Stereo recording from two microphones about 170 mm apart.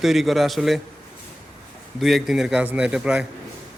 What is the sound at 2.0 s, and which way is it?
A man's voice, centre (ahead or behind).